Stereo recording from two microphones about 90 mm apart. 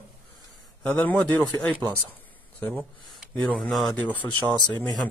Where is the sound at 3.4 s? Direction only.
15° left (ahead or behind).